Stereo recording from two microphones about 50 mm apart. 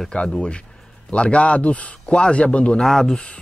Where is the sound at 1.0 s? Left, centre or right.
Left.